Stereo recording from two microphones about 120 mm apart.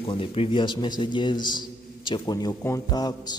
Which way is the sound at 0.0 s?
45° left (ahead or behind).